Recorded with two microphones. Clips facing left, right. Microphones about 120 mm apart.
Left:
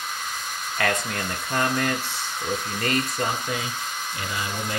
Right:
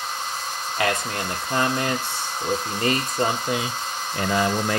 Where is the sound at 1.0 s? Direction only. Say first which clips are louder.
Right 2 dB; 30° right (ahead or behind).